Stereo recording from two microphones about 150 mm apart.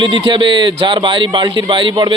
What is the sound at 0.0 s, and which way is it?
A man's voice, 35° right (ahead or behind).